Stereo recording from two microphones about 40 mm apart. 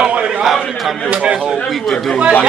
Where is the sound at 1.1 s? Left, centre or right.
Right.